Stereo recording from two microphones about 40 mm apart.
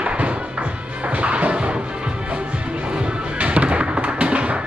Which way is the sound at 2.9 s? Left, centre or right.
Right.